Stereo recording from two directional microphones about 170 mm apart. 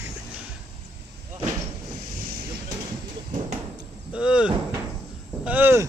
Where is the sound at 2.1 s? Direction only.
65° right (ahead or behind).